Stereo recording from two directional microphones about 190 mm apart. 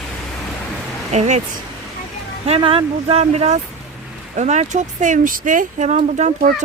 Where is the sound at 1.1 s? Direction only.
35° right (ahead or behind).